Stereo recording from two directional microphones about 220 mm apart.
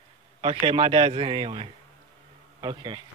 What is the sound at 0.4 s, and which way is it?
Speech, 25° right (ahead or behind).